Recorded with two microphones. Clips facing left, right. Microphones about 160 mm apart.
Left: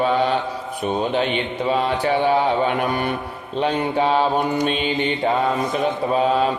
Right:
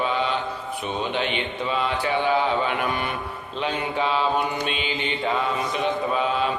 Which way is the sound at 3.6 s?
45° left (ahead or behind).